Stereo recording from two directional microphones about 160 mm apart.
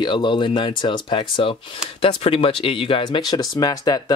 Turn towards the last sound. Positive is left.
turn(degrees=25)  # may be behind; listen again after turning